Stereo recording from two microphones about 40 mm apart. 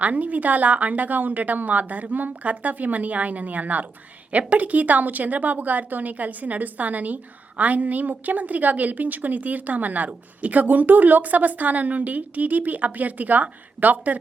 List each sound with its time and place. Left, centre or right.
0.0 s a woman's voice: right